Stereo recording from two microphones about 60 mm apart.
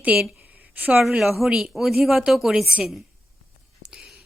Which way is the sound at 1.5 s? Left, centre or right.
Centre.